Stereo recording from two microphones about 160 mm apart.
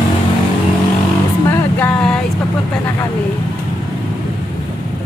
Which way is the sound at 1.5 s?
10° left (ahead or behind).